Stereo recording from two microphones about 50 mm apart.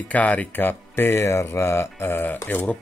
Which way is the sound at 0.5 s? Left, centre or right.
Left.